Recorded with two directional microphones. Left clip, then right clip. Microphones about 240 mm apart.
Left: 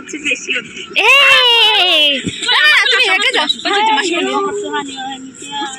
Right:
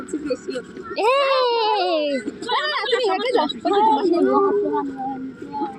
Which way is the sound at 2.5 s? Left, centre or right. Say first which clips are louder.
Left 12 dB; centre.